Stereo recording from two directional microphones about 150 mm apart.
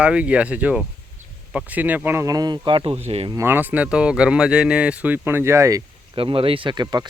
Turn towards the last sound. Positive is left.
turn(degrees=-30)  # may be behind; listen again after turning